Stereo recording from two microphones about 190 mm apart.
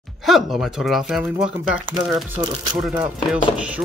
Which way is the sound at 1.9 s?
25° right (ahead or behind).